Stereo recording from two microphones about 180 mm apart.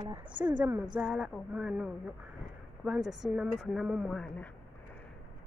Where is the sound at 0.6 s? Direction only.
10° right (ahead or behind).